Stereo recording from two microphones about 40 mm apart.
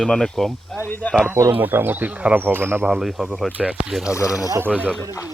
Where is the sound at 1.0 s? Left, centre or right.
Left.